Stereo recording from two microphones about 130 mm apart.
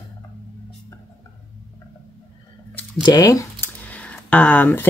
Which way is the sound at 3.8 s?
10° left (ahead or behind).